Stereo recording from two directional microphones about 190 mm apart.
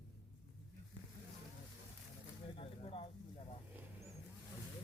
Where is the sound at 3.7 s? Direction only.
15° right (ahead or behind).